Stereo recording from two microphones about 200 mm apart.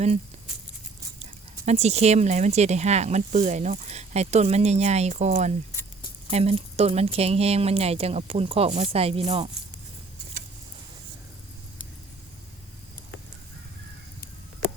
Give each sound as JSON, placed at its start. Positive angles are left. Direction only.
{"t": 1.2, "sound": "speech", "side_deg": -35}